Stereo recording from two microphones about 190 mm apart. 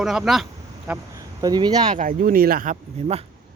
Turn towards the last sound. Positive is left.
turn(degrees=-40)  # may be behind; listen again after turning